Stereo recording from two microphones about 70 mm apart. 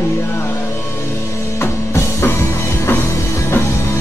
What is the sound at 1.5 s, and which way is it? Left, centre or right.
Music, left.